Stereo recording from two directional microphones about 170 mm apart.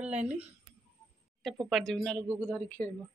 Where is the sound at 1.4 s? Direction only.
Centre (ahead or behind).